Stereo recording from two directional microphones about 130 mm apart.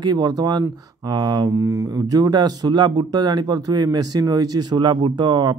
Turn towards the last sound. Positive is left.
turn(degrees=-35)  # may be behind; listen again after turning